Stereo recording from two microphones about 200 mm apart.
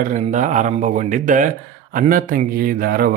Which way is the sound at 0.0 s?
40° right (ahead or behind).